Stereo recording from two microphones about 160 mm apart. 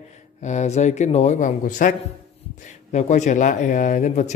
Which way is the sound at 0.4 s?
45° left (ahead or behind).